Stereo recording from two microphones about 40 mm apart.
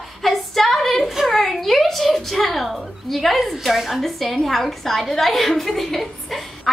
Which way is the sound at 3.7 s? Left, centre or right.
Centre.